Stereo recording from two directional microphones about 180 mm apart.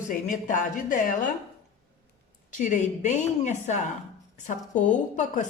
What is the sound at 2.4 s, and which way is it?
A woman's voice, 45° left (ahead or behind).